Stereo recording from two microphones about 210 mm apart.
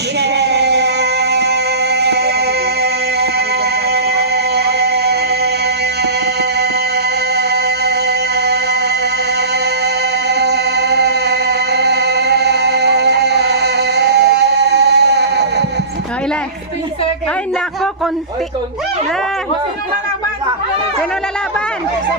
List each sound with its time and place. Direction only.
0.2 s music: 55° right (ahead or behind)
7.3 s music: 50° right (ahead or behind)
9.8 s music: 55° right (ahead or behind)